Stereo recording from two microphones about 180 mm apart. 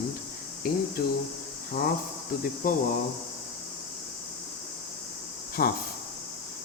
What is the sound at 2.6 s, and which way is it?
Speech, 55° left (ahead or behind).